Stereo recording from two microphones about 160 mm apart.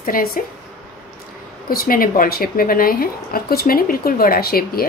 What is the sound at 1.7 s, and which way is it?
A woman's voice, 65° left (ahead or behind).